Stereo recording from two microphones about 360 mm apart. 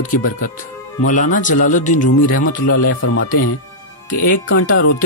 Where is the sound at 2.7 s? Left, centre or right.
Left.